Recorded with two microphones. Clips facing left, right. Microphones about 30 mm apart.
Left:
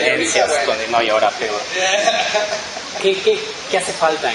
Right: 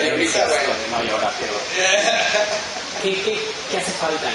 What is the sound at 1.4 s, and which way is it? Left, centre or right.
A man's voice, centre.